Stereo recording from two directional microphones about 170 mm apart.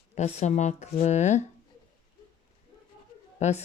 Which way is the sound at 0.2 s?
45° left (ahead or behind).